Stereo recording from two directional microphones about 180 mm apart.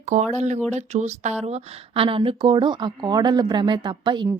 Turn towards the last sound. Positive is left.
turn(degrees=-25)  # may be behind; listen again after turning